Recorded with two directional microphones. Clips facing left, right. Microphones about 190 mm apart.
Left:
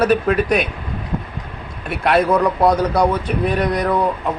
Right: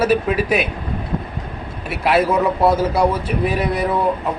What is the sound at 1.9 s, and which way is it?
A man's voice, 5° right (ahead or behind).